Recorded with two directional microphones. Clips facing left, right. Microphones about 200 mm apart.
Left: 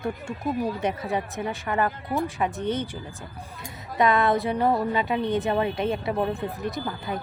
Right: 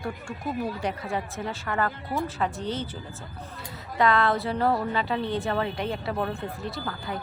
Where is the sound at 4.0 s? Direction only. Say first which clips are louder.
Left 2 dB; 20° left (ahead or behind).